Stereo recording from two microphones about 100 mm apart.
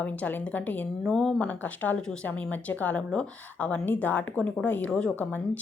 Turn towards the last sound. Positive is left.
turn(degrees=15)  # may be behind; listen again after turning